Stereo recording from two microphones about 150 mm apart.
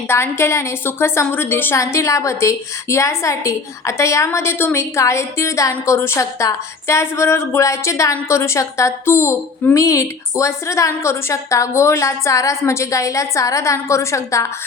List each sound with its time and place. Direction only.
0.1 s a woman's voice: 15° left (ahead or behind)